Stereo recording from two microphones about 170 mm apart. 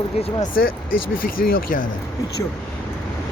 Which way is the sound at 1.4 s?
55° left (ahead or behind).